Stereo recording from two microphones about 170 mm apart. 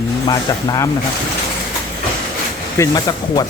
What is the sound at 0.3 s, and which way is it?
Speech, 25° left (ahead or behind).